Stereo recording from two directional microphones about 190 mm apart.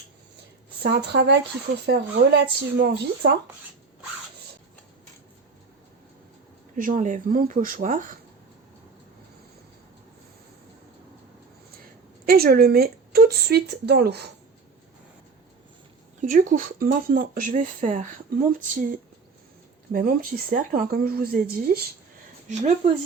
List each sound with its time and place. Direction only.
0.8 s a woman's voice: 60° right (ahead or behind)
6.7 s speech: 45° right (ahead or behind)
12.2 s a woman's voice: 50° right (ahead or behind)
16.2 s speech: 45° right (ahead or behind)
19.9 s speech: 50° right (ahead or behind)
22.4 s speech: 35° right (ahead or behind)